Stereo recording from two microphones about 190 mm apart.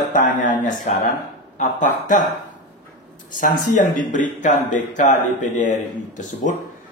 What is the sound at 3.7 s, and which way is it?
Speech, 40° left (ahead or behind).